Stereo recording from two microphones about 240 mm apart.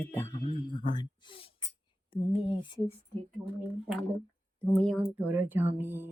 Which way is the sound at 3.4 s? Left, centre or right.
Centre.